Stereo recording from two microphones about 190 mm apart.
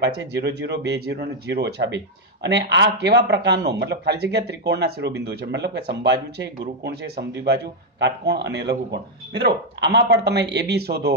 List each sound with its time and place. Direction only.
0.0 s speech: 65° right (ahead or behind)